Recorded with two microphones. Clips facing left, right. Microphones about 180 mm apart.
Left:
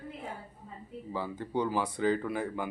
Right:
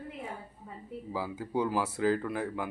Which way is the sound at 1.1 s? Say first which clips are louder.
Even; 5° right (ahead or behind).